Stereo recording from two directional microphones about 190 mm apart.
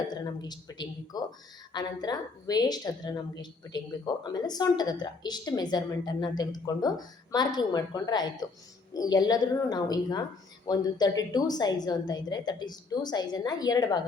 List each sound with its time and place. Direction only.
0.1 s speech: 20° left (ahead or behind)